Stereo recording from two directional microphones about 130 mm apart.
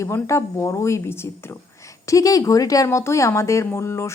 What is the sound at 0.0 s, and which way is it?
Speech, 20° left (ahead or behind).